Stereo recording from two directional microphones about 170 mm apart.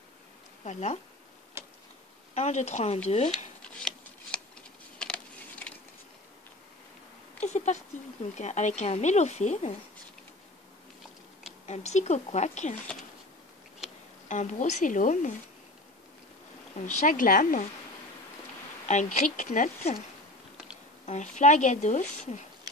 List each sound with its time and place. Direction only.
0.7 s speech: 40° left (ahead or behind)
1.6 s tick-tock: 15° right (ahead or behind)
2.3 s speech: 40° left (ahead or behind)
3.3 s shuffling cards: 5° left (ahead or behind)
4.9 s a sound: 5° left (ahead or behind)
7.3 s speech: 45° left (ahead or behind)
11.6 s speech: 40° left (ahead or behind)
14.3 s speech: 45° left (ahead or behind)
16.7 s speech: 50° left (ahead or behind)
18.9 s speech: 45° left (ahead or behind)
21.0 s speech: 45° left (ahead or behind)